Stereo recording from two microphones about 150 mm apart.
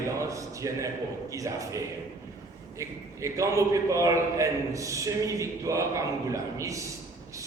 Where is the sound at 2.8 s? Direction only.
20° right (ahead or behind).